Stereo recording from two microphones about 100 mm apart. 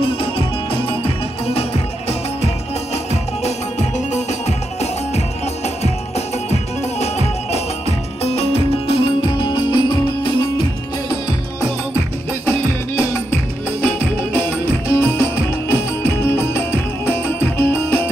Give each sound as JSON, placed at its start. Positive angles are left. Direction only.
{"t": 0.8, "sound": "music", "side_deg": 75}
{"t": 7.0, "sound": "music", "side_deg": 90}
{"t": 9.4, "sound": "music", "side_deg": 50}
{"t": 13.7, "sound": "music", "side_deg": 20}